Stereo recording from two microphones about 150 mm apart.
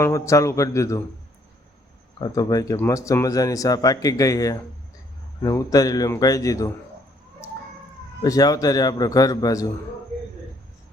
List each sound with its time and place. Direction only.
0.0 s speech: 20° left (ahead or behind)
2.1 s speech: 25° left (ahead or behind)
8.2 s speech: 25° left (ahead or behind)